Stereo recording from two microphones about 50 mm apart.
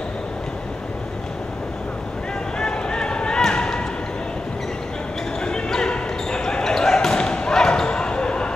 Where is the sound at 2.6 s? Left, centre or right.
Centre.